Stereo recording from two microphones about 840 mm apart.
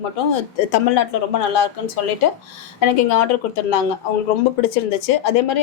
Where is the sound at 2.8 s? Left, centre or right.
Left.